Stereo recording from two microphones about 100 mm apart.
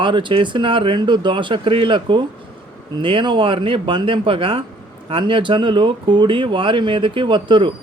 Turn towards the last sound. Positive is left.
turn(degrees=-55)  # may be behind; listen again after turning